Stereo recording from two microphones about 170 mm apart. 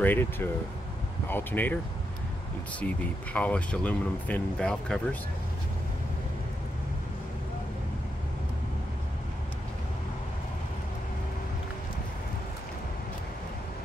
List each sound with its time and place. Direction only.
0.0 s speech: 10° left (ahead or behind)
3.3 s speech: 5° left (ahead or behind)